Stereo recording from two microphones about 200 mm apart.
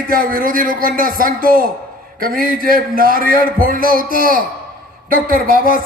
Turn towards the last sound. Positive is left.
turn(degrees=-45)  # may be behind; listen again after turning